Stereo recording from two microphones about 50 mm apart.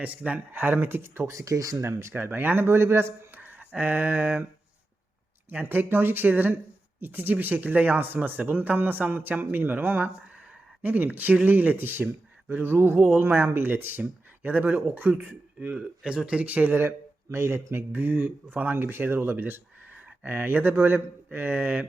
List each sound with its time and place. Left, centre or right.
0.0 s speech: right
2.1 s speech: right
2.6 s a man's voice: right
3.3 s speech: right
5.5 s a man's voice: right
15.7 s speech: right
17.3 s a man's voice: right
17.9 s speech: right